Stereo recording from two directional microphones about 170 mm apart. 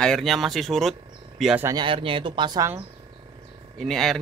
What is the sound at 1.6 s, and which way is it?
Speech, 25° right (ahead or behind).